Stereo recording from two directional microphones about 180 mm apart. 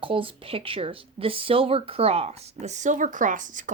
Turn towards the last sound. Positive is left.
turn(degrees=-45)  # may be behind; listen again after turning